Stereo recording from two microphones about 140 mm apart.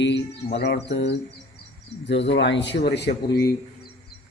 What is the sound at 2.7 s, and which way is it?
Speech, 90° left.